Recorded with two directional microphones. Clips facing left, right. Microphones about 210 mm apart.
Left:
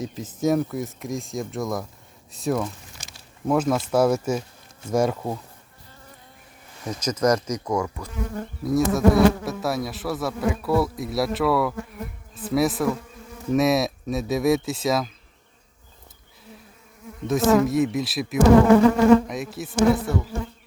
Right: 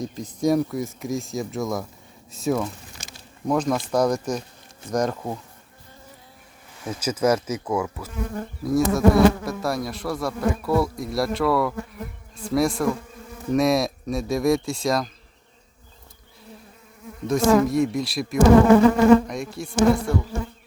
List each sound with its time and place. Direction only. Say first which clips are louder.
0.0 s speech: right 1 dB; 5° left (ahead or behind)
6.8 s speech: even; 5° right (ahead or behind)
17.2 s speech: right 1 dB; centre (ahead or behind)